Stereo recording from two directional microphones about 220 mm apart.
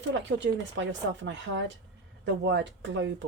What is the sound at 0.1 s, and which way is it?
A woman's voice, 55° right (ahead or behind).